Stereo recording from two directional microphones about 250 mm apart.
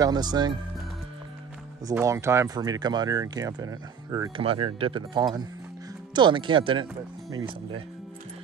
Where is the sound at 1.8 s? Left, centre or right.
Centre.